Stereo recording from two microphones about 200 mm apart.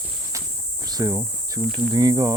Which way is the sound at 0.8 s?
15° right (ahead or behind).